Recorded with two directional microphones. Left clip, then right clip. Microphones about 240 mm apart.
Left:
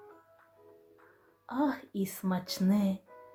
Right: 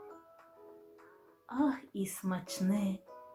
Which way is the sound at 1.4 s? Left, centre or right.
Centre.